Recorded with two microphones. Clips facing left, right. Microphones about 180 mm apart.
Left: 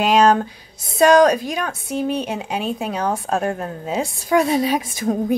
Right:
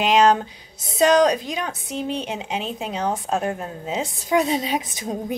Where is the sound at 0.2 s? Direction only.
45° left (ahead or behind).